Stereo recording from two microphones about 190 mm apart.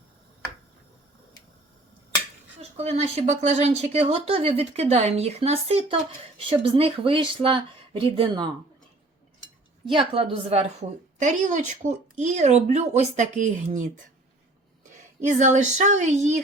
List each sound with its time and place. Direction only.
2.6 s a woman's voice: 35° right (ahead or behind)
9.8 s a woman's voice: 30° right (ahead or behind)
15.2 s a woman's voice: 40° right (ahead or behind)